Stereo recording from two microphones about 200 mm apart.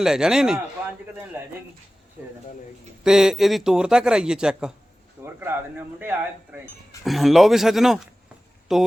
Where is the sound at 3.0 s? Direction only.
5° right (ahead or behind).